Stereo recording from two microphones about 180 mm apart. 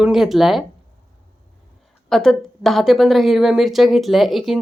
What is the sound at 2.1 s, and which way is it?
Speech, centre (ahead or behind).